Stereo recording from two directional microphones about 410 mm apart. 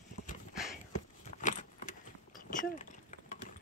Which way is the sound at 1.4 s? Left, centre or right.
Centre.